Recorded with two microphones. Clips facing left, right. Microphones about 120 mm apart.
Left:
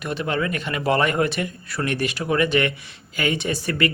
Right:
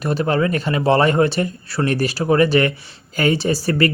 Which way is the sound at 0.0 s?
40° right (ahead or behind).